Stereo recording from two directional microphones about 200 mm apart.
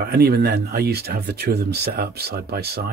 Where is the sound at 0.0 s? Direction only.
50° right (ahead or behind).